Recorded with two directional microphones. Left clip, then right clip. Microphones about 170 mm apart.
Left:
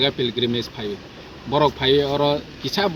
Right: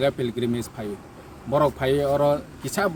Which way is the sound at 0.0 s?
15° right (ahead or behind).